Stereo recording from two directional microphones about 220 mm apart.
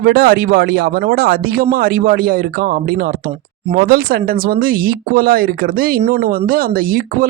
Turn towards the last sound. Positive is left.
turn(degrees=-40)  # may be behind; listen again after turning